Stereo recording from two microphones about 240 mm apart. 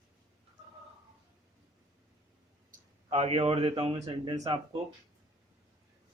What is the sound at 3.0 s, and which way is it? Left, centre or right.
A man's voice, right.